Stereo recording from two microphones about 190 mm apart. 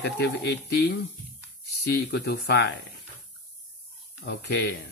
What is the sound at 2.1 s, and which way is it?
Speech, 60° left (ahead or behind).